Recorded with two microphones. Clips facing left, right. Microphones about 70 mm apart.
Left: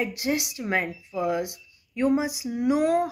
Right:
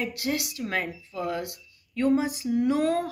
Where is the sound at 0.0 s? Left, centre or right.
Left.